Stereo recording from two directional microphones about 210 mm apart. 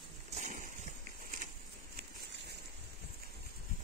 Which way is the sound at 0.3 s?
35° right (ahead or behind).